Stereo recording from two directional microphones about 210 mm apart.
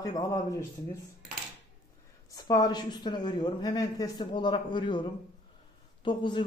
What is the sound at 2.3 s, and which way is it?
A woman's voice, 20° left (ahead or behind).